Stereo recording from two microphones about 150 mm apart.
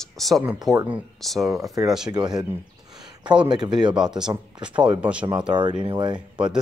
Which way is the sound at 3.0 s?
30° right (ahead or behind).